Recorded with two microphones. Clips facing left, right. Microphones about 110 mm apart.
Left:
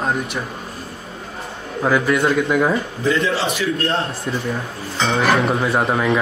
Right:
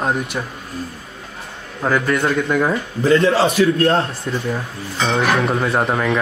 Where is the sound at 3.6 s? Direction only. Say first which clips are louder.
Right 7 dB; 50° right (ahead or behind).